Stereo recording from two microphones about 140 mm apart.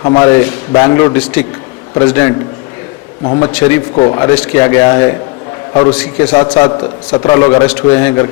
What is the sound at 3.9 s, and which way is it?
Speech, 35° left (ahead or behind).